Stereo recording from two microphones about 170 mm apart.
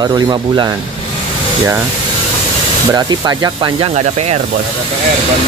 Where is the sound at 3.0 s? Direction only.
25° right (ahead or behind).